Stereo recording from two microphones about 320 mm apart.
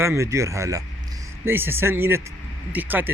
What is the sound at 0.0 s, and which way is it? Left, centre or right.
A man's voice, centre.